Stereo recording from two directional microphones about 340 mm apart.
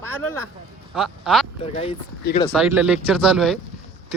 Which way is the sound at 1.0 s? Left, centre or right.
Centre.